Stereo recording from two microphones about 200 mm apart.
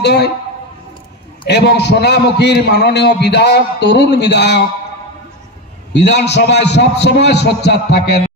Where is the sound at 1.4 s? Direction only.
55° left (ahead or behind).